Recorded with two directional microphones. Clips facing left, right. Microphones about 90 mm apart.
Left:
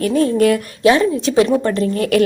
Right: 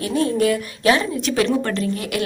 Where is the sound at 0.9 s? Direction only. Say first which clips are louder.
Left 5 dB; 30° left (ahead or behind).